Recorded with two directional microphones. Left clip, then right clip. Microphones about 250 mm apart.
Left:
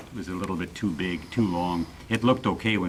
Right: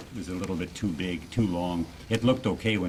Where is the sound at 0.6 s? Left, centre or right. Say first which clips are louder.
Left 2 dB; centre.